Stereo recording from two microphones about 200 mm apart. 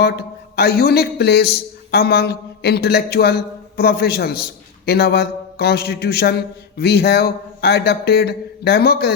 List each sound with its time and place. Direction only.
0.5 s a man's voice: 50° left (ahead or behind)